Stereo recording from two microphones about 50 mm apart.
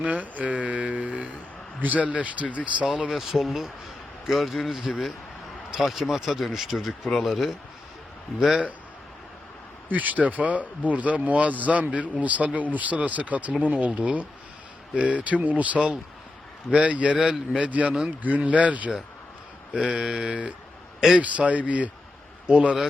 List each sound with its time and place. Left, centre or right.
0.0 s a sound: right
1.8 s speech: right
2.8 s speech: centre
8.4 s speech: centre
9.9 s speech: right
19.7 s speech: centre